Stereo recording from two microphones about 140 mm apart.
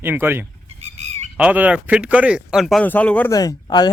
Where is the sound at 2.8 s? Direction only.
10° left (ahead or behind).